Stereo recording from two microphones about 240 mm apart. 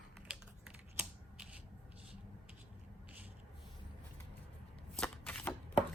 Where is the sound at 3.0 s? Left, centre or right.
Centre.